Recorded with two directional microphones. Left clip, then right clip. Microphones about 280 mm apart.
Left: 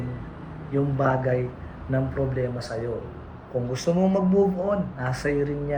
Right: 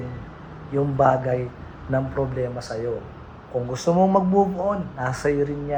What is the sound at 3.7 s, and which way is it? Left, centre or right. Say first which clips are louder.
Speech: right 3 dB; right.